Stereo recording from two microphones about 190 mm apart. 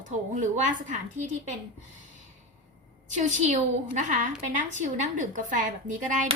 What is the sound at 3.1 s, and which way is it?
A woman's voice, 40° right (ahead or behind).